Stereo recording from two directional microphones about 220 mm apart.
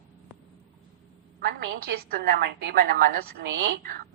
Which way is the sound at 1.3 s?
45° right (ahead or behind).